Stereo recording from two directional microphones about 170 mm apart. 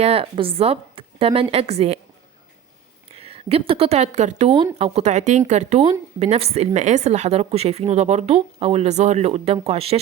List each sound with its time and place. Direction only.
0.0 s speech: 35° right (ahead or behind)
3.1 s speech: 35° right (ahead or behind)